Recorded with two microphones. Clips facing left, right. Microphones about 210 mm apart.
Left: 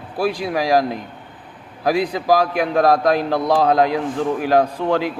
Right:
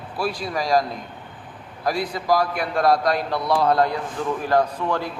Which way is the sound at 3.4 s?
90° left.